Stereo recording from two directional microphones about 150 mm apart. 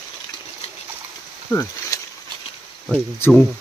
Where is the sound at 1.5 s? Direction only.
30° left (ahead or behind).